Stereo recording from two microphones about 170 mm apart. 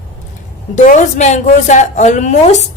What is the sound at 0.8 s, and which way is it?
A woman's voice, 45° left (ahead or behind).